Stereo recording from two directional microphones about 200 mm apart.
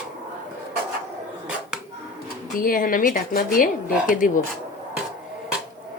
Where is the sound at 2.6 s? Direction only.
45° left (ahead or behind).